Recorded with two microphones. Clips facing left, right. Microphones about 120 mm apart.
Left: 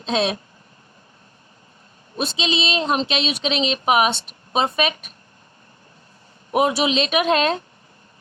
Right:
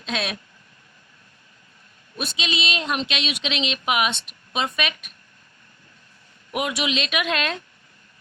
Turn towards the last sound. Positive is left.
turn(degrees=35)  # may be behind; listen again after turning